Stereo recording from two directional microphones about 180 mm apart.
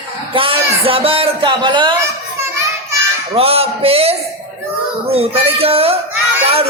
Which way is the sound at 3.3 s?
35° right (ahead or behind).